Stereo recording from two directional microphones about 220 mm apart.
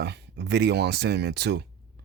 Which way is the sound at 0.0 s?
50° right (ahead or behind).